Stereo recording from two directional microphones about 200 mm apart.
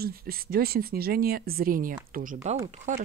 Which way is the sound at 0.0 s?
50° right (ahead or behind).